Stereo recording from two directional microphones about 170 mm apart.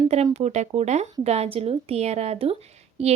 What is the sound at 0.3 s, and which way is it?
Speech, 40° right (ahead or behind).